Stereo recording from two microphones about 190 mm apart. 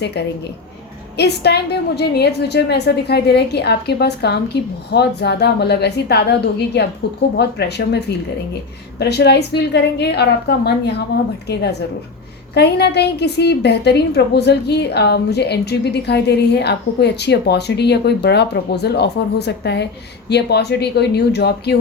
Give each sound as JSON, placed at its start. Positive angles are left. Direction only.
{"t": 0.0, "sound": "a woman's voice", "side_deg": 60}